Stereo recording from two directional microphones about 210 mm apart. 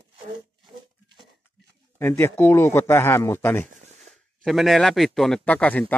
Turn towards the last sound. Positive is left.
turn(degrees=5)  # may be behind; listen again after turning